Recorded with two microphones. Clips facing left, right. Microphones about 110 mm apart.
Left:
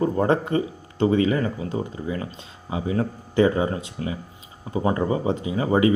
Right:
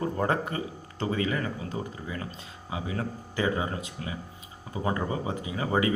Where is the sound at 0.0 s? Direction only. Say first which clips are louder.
Left 7 dB; 30° left (ahead or behind).